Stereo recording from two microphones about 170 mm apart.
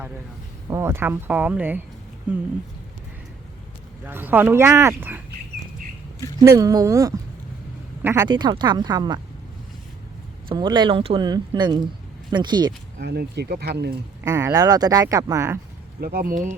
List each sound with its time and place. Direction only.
0.7 s speech: 15° right (ahead or behind)
4.0 s speech: 10° right (ahead or behind)
6.4 s speech: 20° right (ahead or behind)
8.3 s speech: 25° right (ahead or behind)
10.5 s speech: 25° right (ahead or behind)
13.0 s speech: 75° right (ahead or behind)
14.3 s speech: 15° right (ahead or behind)
16.0 s speech: 60° right (ahead or behind)